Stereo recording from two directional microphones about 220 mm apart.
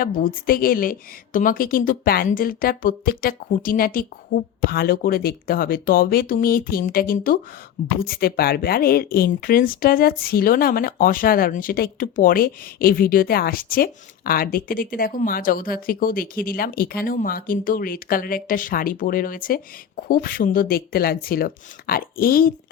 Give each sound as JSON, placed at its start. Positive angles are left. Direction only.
{"t": 0.0, "sound": "speech", "side_deg": 40}